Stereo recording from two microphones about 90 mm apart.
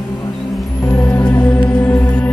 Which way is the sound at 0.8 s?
15° left (ahead or behind).